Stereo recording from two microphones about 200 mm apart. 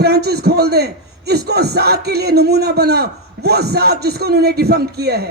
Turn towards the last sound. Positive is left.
turn(degrees=-55)  # may be behind; listen again after turning